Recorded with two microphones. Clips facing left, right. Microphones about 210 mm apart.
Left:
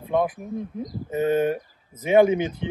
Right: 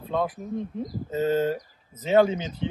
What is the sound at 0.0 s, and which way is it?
Speech, 15° left (ahead or behind).